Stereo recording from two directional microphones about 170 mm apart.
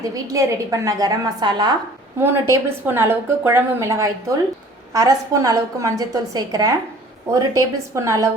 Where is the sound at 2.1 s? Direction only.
15° right (ahead or behind).